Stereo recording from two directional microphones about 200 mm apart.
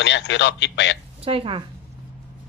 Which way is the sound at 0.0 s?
60° left (ahead or behind).